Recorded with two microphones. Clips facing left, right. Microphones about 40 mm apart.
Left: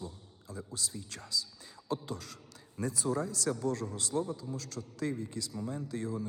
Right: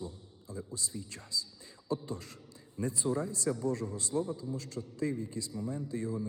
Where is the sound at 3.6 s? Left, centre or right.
Left.